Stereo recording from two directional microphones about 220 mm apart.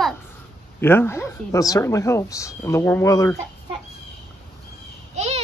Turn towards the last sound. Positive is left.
turn(degrees=-30)  # may be behind; listen again after turning